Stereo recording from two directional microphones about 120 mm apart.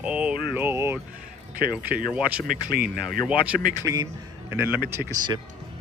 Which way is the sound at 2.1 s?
10° right (ahead or behind).